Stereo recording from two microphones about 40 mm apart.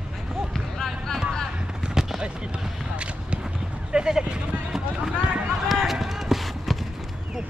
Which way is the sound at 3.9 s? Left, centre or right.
Right.